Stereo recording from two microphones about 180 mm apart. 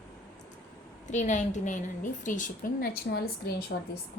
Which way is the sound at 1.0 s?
40° left (ahead or behind).